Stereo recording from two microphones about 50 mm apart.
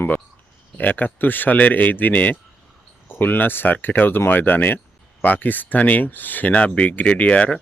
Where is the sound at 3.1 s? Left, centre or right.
Left.